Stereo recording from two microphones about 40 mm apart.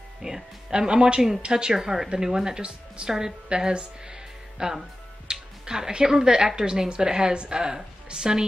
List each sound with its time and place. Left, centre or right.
0.2 s a woman's voice: centre